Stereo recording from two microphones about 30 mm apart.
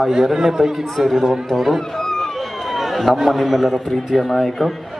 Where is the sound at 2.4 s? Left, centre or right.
Centre.